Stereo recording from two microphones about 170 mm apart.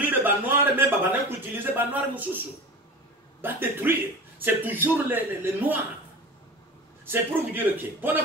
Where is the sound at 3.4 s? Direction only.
10° right (ahead or behind).